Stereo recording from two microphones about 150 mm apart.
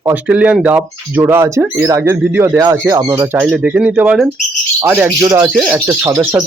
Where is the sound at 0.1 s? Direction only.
10° right (ahead or behind).